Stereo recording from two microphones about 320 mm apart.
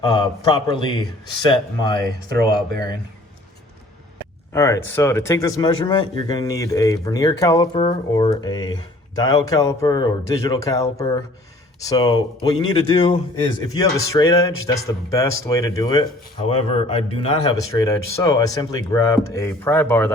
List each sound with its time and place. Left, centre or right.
0.0 s speech: centre
4.5 s speech: centre